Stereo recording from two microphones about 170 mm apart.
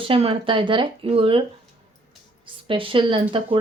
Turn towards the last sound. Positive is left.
turn(degrees=-30)  # may be behind; listen again after turning